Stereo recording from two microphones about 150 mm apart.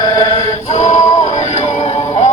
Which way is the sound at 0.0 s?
25° left (ahead or behind).